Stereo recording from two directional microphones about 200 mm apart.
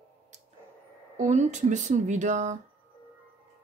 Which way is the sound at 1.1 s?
35° right (ahead or behind).